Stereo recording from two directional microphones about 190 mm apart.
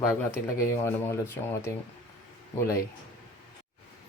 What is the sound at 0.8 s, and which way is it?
Speech, 15° left (ahead or behind).